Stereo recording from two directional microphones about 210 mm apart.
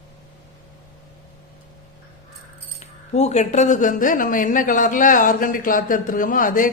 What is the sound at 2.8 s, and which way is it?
Speech, 30° left (ahead or behind).